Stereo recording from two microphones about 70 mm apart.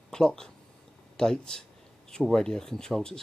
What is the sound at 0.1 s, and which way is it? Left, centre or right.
Speech, centre.